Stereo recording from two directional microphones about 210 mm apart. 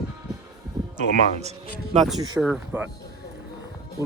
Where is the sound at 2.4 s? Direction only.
5° right (ahead or behind).